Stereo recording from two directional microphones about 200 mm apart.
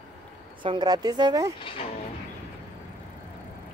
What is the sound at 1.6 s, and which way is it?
Speech, 25° left (ahead or behind).